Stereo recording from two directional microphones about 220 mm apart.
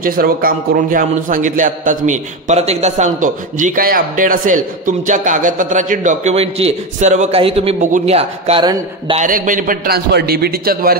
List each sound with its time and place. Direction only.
0.0 s a man's voice: 40° right (ahead or behind); by 9.2 s 20° right (ahead or behind)
9.2 s a man's voice: 35° right (ahead or behind)